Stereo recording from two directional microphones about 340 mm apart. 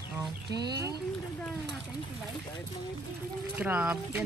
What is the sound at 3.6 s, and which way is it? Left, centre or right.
Speech, centre.